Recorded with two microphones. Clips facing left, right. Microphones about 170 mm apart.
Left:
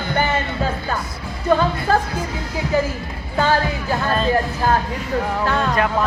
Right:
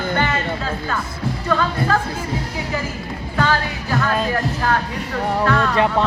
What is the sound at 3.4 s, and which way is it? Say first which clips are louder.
Speech: left 2 dB; 30° left (ahead or behind).